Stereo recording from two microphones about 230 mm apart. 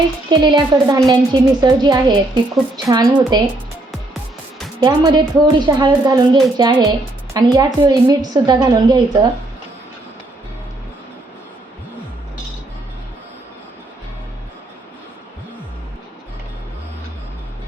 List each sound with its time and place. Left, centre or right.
0.3 s a woman's voice: centre
4.8 s a woman's voice: centre